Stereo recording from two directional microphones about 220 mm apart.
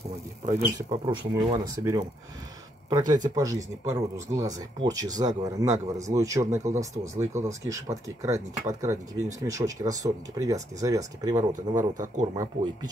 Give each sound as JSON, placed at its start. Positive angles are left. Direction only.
{"t": 0.7, "sound": "speech", "side_deg": -20}
{"t": 11.5, "sound": "speech", "side_deg": -35}